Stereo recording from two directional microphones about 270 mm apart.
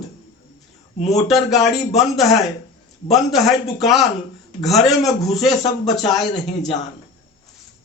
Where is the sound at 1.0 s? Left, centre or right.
Left.